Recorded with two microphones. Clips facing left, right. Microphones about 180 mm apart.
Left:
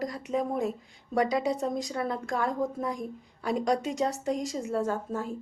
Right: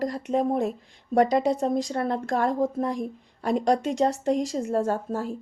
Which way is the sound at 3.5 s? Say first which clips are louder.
Right 5 dB; 60° right (ahead or behind).